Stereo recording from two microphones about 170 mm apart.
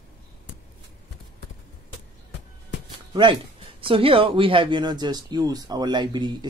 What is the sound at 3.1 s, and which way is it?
Speech, 30° right (ahead or behind).